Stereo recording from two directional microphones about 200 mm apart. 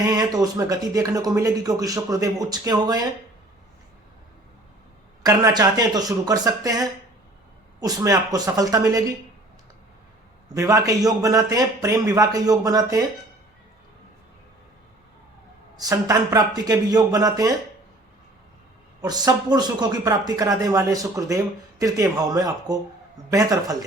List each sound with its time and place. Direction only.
0.0 s speech: 20° right (ahead or behind)
5.2 s speech: 20° right (ahead or behind)
10.5 s speech: 15° right (ahead or behind)
15.8 s speech: 15° right (ahead or behind)
19.0 s speech: 20° right (ahead or behind)